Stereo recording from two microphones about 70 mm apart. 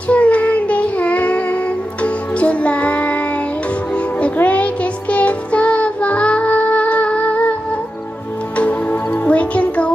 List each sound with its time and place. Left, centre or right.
0.1 s child singing: centre
2.4 s music: centre
4.2 s music: centre
9.2 s music: centre